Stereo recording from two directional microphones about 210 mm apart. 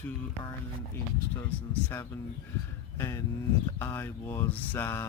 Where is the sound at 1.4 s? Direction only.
10° left (ahead or behind).